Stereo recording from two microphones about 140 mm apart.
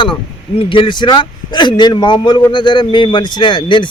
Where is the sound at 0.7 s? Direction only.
35° left (ahead or behind).